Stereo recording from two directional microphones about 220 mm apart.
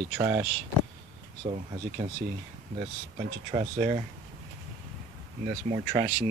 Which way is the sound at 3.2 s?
30° right (ahead or behind).